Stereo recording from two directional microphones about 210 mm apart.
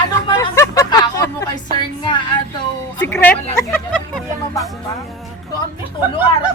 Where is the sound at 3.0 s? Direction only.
10° left (ahead or behind).